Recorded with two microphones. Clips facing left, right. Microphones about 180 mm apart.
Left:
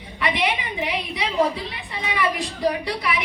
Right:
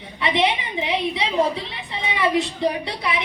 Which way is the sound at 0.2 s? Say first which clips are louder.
Right 3 dB; 25° right (ahead or behind).